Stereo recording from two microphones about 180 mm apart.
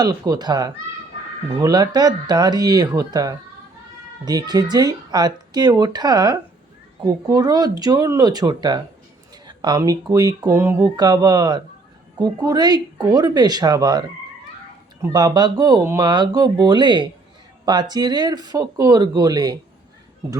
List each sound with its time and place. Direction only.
0.0 s speech: 20° right (ahead or behind)
15.0 s speech: 20° right (ahead or behind)